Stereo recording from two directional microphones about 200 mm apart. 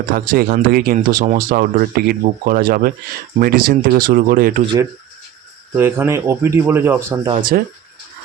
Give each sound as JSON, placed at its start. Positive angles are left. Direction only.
{"t": 0.3, "sound": "speech", "side_deg": -45}
{"t": 4.6, "sound": "speech", "side_deg": -20}
{"t": 7.5, "sound": "speech", "side_deg": -45}